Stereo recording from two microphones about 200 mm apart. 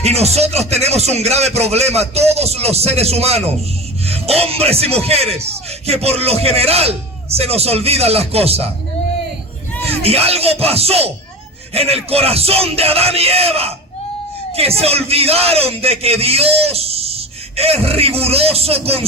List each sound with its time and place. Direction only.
0.0 s a man's voice: 30° right (ahead or behind)
9.8 s a man's voice: 30° right (ahead or behind)
14.8 s speech: 30° right (ahead or behind)